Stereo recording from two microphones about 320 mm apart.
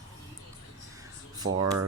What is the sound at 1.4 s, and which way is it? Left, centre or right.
Speech, right.